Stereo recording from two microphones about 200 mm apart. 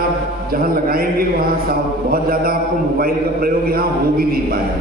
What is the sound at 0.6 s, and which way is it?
A man's voice, 45° right (ahead or behind).